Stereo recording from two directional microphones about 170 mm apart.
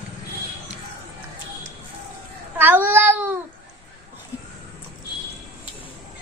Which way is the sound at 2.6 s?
10° right (ahead or behind).